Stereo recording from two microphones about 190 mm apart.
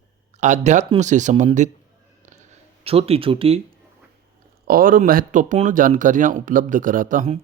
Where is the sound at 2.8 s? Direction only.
30° right (ahead or behind).